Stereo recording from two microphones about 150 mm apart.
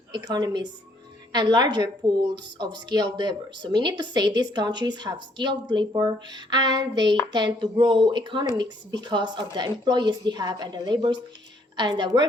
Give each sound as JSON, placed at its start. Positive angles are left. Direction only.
{"t": 0.1, "sound": "a woman's voice", "side_deg": -25}